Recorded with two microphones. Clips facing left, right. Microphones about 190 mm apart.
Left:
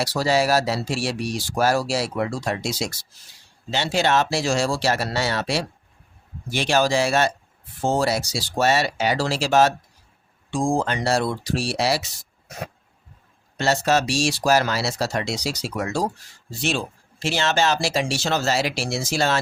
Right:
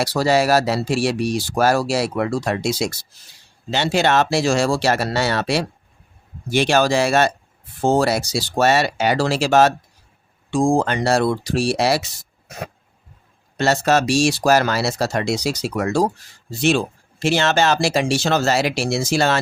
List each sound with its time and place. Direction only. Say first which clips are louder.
0.0 s speech: right 3 dB; 60° right (ahead or behind)
13.6 s speech: right 3 dB; 60° right (ahead or behind)